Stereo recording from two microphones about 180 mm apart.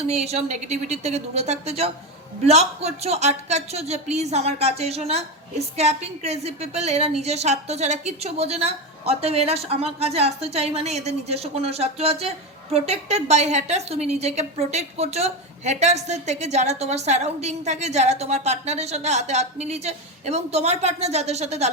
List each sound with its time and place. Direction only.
0.0 s a woman's voice: 35° right (ahead or behind)